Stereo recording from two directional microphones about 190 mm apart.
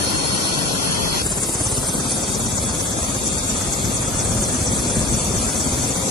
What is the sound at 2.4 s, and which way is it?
Vehicle, 25° left (ahead or behind).